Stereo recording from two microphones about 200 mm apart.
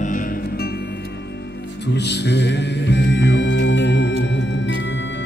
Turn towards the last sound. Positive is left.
turn(degrees=65)  # may be behind; listen again after turning